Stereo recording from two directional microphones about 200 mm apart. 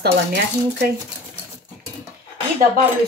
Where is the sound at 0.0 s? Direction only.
55° right (ahead or behind).